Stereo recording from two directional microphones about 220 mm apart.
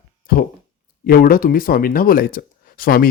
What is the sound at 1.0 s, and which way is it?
Speech, 40° left (ahead or behind).